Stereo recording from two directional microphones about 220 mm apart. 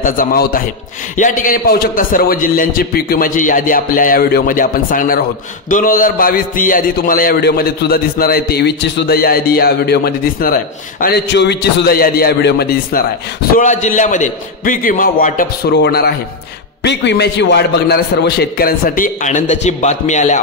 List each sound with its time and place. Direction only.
0.0 s a man's voice: 40° left (ahead or behind)
13.6 s a man's voice: 35° left (ahead or behind)